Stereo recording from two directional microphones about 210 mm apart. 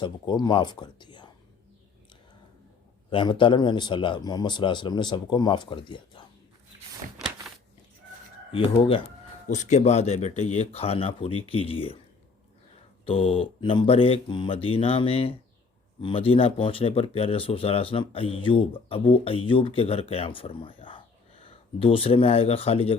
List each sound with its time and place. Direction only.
0.0 s speech: 20° left (ahead or behind)
3.1 s speech: 25° left (ahead or behind)
7.2 s a sound: centre (ahead or behind)
9.5 s speech: 35° left (ahead or behind)
13.1 s speech: 25° left (ahead or behind)